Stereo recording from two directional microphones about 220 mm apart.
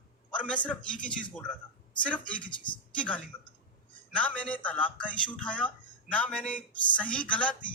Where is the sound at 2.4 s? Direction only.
20° left (ahead or behind).